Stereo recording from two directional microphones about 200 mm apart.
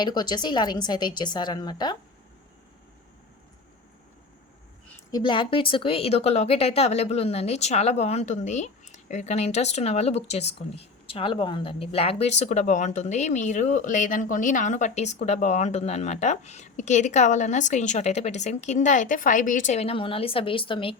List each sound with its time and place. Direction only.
0.0 s a woman's voice: 20° left (ahead or behind)
5.1 s a woman's voice: 25° left (ahead or behind)